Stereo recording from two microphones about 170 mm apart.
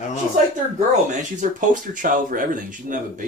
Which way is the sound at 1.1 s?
45° right (ahead or behind).